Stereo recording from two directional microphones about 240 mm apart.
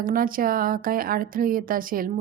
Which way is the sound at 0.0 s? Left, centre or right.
Right.